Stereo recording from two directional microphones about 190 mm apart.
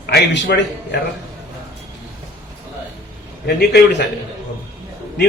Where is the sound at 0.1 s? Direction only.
60° left (ahead or behind).